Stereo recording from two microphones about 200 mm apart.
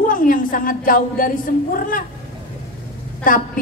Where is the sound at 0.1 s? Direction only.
45° left (ahead or behind).